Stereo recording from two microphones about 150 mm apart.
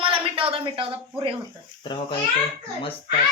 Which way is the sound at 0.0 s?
35° right (ahead or behind).